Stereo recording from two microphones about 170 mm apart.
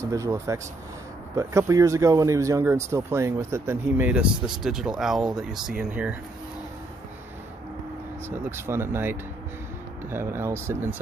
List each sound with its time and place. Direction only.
0.0 s speech: 15° right (ahead or behind)
8.3 s speech: 15° right (ahead or behind)